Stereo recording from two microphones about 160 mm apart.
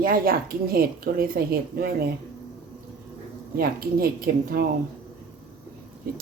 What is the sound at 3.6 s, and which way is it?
Speech, 65° right (ahead or behind).